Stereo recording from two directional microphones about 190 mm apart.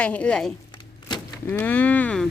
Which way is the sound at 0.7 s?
25° left (ahead or behind).